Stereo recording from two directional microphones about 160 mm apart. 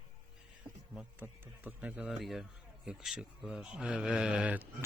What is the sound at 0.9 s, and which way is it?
Speech, 10° right (ahead or behind).